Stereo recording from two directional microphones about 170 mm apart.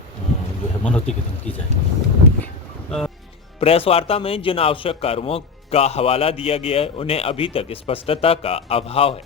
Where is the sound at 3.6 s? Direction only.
35° left (ahead or behind).